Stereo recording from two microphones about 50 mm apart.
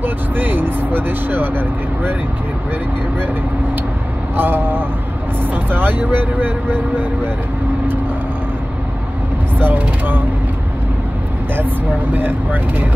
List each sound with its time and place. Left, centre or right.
0.0 s vehicle: right
4.4 s speech: right
9.6 s speech: right
12.1 s speech: right